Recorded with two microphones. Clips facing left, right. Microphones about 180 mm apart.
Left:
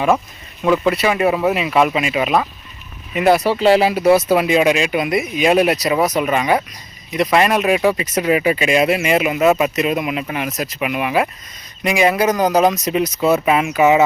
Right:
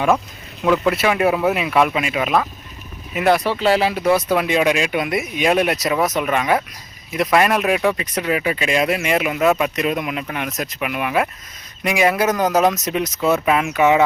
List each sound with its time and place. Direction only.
0.6 s speech: centre (ahead or behind)